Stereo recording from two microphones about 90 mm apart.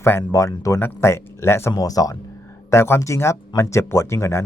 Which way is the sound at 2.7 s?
30° left (ahead or behind).